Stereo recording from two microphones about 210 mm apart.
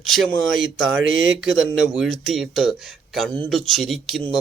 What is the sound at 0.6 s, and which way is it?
Speech, 65° right (ahead or behind).